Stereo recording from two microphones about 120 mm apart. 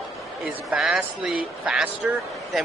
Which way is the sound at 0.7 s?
5° right (ahead or behind).